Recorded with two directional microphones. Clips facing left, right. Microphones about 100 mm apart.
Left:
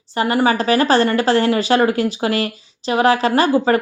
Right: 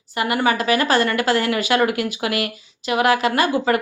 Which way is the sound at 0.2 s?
30° left (ahead or behind).